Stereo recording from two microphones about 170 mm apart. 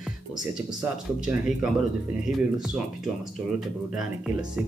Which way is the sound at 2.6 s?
Centre (ahead or behind).